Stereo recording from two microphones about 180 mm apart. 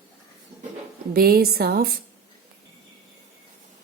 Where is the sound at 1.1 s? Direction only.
60° right (ahead or behind).